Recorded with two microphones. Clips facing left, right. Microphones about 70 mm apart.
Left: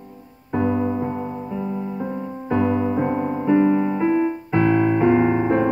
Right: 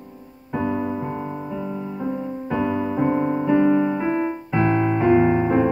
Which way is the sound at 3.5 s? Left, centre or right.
Centre.